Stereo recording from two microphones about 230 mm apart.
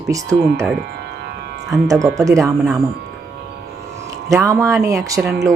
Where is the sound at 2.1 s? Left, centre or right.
Centre.